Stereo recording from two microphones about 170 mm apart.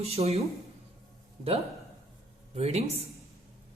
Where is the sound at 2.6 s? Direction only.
40° right (ahead or behind).